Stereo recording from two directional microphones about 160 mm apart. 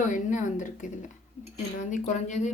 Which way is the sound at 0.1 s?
50° left (ahead or behind).